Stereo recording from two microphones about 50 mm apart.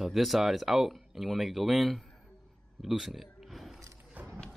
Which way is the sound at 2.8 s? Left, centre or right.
Centre.